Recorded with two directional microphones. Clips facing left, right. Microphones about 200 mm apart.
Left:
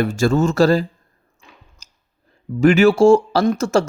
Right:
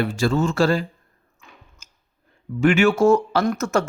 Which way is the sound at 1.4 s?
35° left (ahead or behind).